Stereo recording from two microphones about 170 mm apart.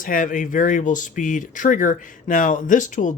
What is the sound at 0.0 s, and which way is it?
Speech, 50° left (ahead or behind).